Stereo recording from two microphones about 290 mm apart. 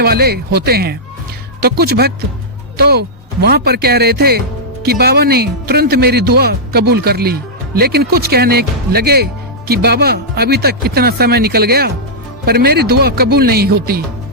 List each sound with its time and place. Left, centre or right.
0.0 s speech: right